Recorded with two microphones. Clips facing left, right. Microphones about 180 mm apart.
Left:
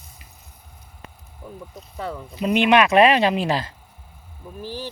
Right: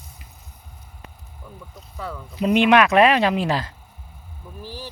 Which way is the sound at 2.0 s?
25° left (ahead or behind).